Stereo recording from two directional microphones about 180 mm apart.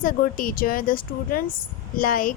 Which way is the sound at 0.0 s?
50° left (ahead or behind).